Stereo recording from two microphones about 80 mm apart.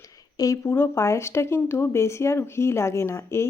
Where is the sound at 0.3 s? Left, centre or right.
Left.